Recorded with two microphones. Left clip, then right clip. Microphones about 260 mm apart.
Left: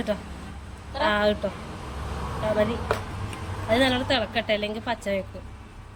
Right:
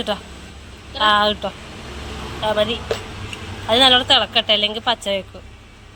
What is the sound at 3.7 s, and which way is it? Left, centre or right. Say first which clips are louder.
A woman's voice: right 9 dB; centre.